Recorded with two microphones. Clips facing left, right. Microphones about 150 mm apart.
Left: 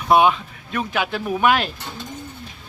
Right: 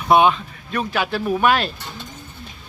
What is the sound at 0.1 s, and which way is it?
Speech, 5° left (ahead or behind).